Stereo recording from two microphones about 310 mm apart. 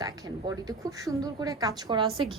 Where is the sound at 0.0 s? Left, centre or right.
Centre.